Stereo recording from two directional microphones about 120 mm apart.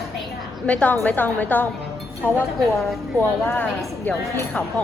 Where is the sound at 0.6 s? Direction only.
10° left (ahead or behind).